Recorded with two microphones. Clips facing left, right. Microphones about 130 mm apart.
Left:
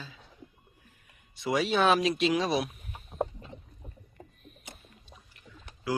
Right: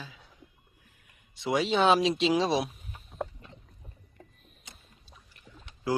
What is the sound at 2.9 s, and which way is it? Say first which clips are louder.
Rowboat: left 8 dB; 25° left (ahead or behind).